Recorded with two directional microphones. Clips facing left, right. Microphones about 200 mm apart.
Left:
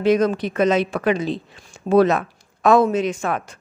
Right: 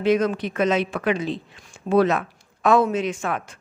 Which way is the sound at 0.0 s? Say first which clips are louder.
Left 3 dB; 40° left (ahead or behind).